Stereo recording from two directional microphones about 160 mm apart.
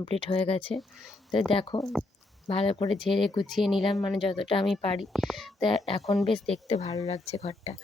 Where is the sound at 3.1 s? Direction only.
Centre (ahead or behind).